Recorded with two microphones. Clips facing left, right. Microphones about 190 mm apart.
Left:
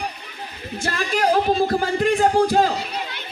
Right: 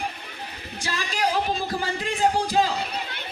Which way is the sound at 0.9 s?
50° left (ahead or behind).